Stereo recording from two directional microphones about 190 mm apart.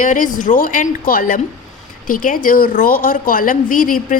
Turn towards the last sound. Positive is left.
turn(degrees=45)  # may be behind; listen again after turning